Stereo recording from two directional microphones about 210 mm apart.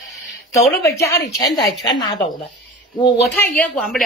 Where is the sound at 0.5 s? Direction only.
15° left (ahead or behind).